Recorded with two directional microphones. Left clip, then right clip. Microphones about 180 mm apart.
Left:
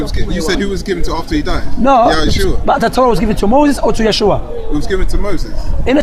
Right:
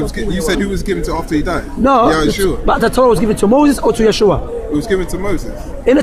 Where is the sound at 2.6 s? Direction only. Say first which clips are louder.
Even; 40° left (ahead or behind).